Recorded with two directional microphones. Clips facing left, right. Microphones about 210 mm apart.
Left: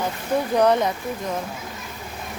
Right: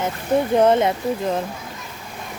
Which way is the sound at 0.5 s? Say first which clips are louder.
Right 2 dB; 25° right (ahead or behind).